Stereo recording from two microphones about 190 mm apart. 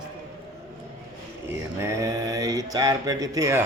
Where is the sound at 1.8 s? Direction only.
15° right (ahead or behind).